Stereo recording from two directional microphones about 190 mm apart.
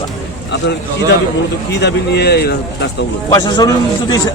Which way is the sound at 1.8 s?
60° left (ahead or behind).